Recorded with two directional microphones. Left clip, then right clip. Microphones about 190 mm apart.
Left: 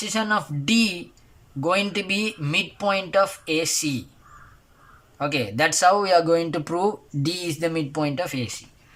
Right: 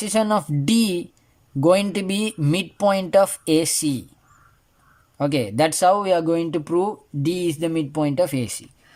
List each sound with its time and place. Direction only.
0.0 s speech: 35° right (ahead or behind)
5.1 s speech: 30° right (ahead or behind)